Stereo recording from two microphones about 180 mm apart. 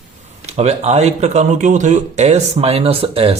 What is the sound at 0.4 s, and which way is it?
Speech, 35° right (ahead or behind).